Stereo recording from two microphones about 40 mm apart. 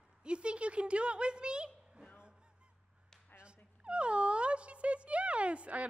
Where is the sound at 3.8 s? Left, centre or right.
Right.